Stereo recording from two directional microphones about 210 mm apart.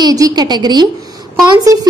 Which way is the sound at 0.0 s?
20° right (ahead or behind).